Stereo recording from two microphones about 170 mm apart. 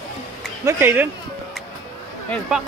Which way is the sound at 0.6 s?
15° right (ahead or behind).